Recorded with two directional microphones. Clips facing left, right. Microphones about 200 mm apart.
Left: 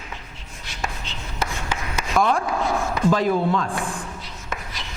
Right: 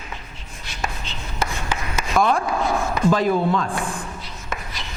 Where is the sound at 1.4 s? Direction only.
15° right (ahead or behind).